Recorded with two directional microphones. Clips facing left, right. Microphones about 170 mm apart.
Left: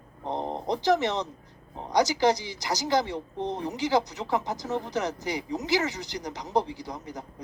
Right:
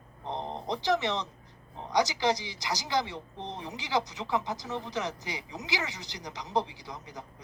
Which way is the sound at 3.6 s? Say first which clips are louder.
Left 5 dB; 40° left (ahead or behind).